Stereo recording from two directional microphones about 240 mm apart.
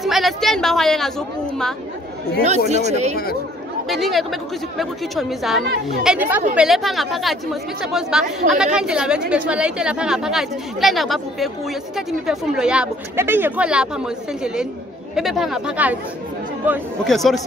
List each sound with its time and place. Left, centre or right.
0.0 s a woman's voice: centre
2.7 s speech: right
3.9 s a woman's voice: centre